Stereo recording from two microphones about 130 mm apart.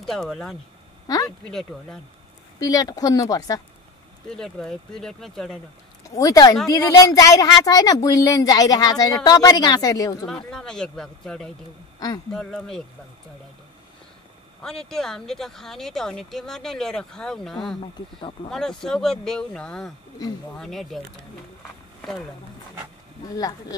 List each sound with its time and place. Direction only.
0.0 s speech: centre (ahead or behind)
1.0 s a sound: 30° left (ahead or behind)
1.4 s speech: 5° left (ahead or behind)
2.6 s speech: 30° left (ahead or behind)
4.3 s speech: 5° left (ahead or behind)
6.0 s speech: 25° left (ahead or behind)
10.2 s speech: 5° left (ahead or behind)
14.6 s speech: 5° left (ahead or behind)
23.2 s speech: 25° left (ahead or behind)